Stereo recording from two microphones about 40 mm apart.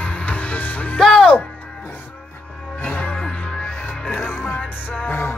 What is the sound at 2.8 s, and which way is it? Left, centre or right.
Music, left.